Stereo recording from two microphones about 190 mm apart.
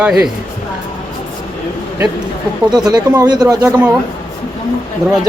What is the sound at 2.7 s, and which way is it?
Speech, 20° right (ahead or behind).